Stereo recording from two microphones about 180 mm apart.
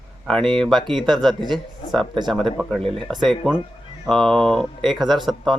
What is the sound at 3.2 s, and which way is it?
Speech, centre (ahead or behind).